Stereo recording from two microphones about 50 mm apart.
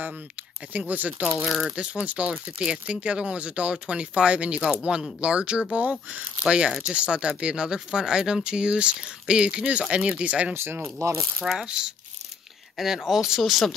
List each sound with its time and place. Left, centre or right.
0.7 s speech: right
1.4 s speech: centre
2.0 s speech: right
10.5 s speech: right
11.0 s speech: right
11.5 s speech: centre
12.7 s speech: centre